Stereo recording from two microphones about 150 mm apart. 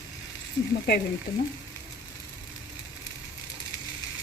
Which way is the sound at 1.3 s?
20° left (ahead or behind).